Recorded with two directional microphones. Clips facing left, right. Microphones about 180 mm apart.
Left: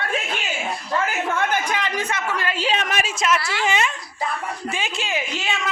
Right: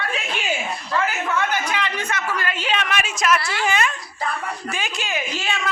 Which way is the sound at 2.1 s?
25° left (ahead or behind).